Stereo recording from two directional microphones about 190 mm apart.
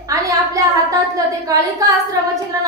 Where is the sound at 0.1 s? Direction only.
15° right (ahead or behind).